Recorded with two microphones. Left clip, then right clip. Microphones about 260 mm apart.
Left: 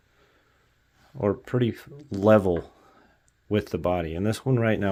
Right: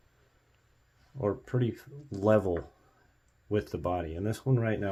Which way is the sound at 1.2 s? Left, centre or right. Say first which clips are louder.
Left 6 dB; left.